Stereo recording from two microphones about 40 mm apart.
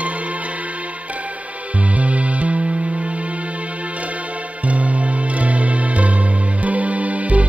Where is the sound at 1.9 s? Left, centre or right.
Right.